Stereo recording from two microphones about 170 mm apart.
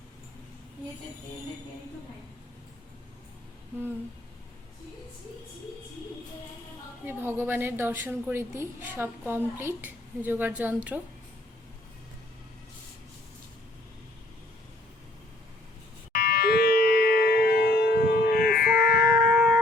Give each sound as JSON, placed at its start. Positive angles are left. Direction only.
{"t": 7.0, "sound": "a woman's voice", "side_deg": -10}
{"t": 16.1, "sound": "civil defense siren", "side_deg": 70}